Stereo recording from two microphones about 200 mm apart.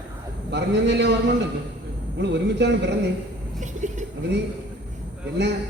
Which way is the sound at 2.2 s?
60° right (ahead or behind).